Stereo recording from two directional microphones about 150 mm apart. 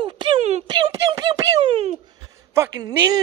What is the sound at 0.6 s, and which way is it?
Speech, 30° right (ahead or behind).